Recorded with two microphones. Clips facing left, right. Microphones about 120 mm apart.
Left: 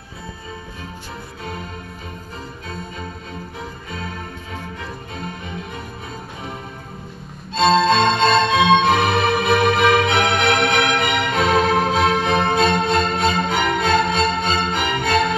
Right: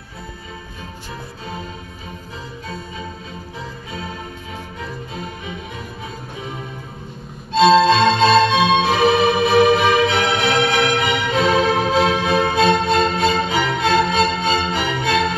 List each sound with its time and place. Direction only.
7.9 s music: 50° left (ahead or behind)